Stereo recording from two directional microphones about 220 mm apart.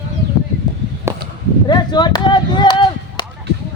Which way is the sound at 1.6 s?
20° left (ahead or behind).